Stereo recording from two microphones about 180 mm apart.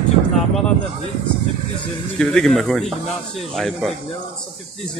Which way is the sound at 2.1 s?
5° left (ahead or behind).